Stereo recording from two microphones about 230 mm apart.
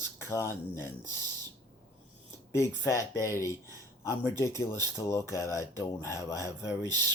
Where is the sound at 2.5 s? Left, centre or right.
Centre.